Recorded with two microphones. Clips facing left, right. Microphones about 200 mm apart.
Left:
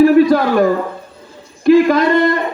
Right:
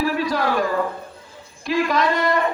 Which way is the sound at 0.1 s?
55° left (ahead or behind).